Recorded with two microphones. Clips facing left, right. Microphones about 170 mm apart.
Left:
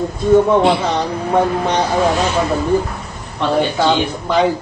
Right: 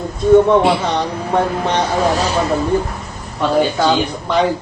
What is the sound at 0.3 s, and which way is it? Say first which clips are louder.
A man's voice: right 1 dB; centre (ahead or behind).